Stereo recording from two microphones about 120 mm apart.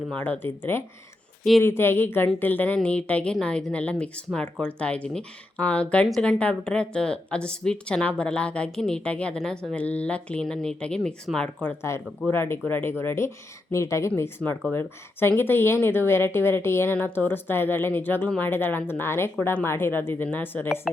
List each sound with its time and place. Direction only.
0.1 s a woman's voice: 15° left (ahead or behind)
12.3 s a woman's voice: 20° left (ahead or behind)
20.9 s speech: centre (ahead or behind)